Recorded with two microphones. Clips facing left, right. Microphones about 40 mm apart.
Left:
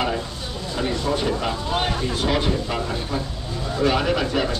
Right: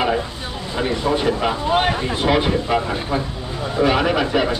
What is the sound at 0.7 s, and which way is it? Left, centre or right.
Speech, right.